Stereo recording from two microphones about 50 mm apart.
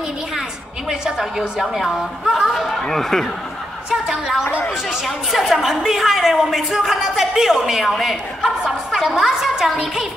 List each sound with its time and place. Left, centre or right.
0.8 s speech: centre
1.6 s a woman's voice: centre
2.5 s a woman's voice: centre
3.9 s speech: centre
4.5 s speech: left
4.8 s a woman's voice: centre